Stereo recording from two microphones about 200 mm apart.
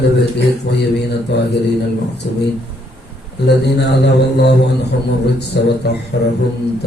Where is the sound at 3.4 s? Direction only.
55° left (ahead or behind).